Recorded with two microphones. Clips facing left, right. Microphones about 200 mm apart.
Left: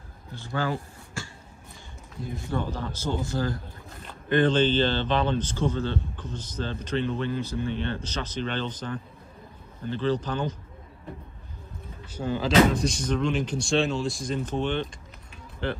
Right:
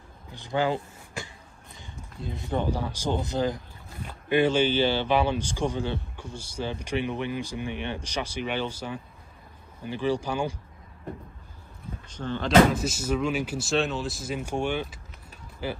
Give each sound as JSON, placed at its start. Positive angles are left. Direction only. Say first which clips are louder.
{"t": 0.3, "sound": "speech", "louder": "right 3 dB", "side_deg": -15}
{"t": 12.1, "sound": "speech", "louder": "right 2 dB", "side_deg": 10}